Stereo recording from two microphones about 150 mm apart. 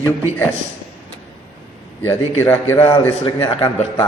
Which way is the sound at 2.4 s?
15° left (ahead or behind).